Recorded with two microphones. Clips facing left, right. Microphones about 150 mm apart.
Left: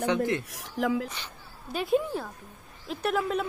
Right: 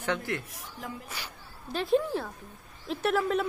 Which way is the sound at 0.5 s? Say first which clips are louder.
Left 12 dB; 90° left.